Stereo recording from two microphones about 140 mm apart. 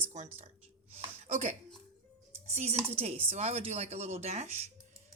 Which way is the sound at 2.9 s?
45° right (ahead or behind).